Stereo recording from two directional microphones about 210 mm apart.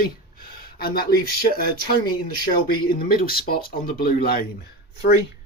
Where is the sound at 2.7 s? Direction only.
45° left (ahead or behind).